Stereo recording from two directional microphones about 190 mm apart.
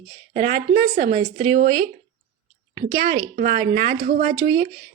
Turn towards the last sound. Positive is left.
turn(degrees=-20)  # may be behind; listen again after turning